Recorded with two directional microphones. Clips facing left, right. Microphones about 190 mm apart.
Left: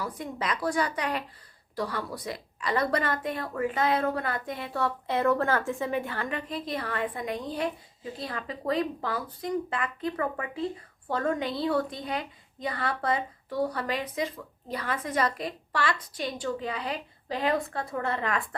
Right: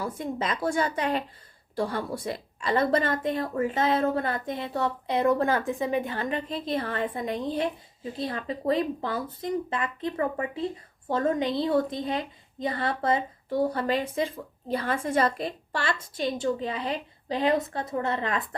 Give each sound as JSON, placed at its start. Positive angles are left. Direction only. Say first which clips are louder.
{"t": 0.0, "sound": "a woman's voice", "louder": "right 3 dB", "side_deg": -25}